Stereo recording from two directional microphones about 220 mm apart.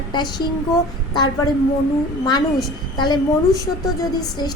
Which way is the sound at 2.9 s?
20° left (ahead or behind).